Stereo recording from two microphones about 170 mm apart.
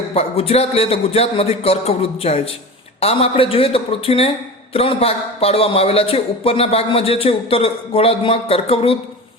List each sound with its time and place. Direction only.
0.1 s a man's voice: 35° left (ahead or behind)